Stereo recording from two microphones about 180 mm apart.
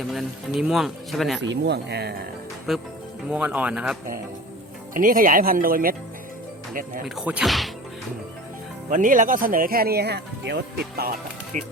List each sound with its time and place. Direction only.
0.0 s speech: centre (ahead or behind)
1.4 s speech: 75° right (ahead or behind)
2.7 s speech: centre (ahead or behind)
4.9 s speech: 50° right (ahead or behind)
7.0 s speech: 5° right (ahead or behind)
8.9 s speech: 45° right (ahead or behind)